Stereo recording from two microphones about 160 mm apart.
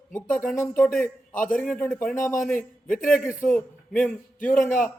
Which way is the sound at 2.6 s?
55° left (ahead or behind).